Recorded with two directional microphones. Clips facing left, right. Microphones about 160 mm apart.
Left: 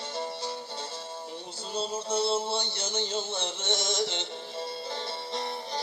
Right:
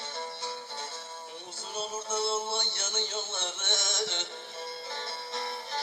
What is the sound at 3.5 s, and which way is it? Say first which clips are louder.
Music: left 5 dB; 20° left (ahead or behind).